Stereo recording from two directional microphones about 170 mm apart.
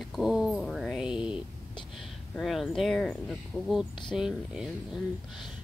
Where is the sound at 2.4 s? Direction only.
Centre (ahead or behind).